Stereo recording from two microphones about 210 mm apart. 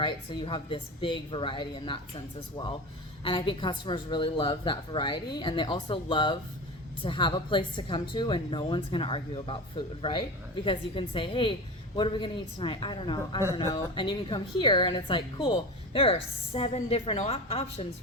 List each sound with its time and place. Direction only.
0.0 s a woman's voice: 25° left (ahead or behind)